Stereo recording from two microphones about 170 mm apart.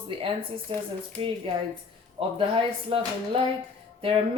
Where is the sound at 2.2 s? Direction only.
35° right (ahead or behind).